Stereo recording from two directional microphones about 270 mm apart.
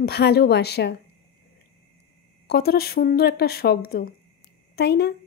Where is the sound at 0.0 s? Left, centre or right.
Left.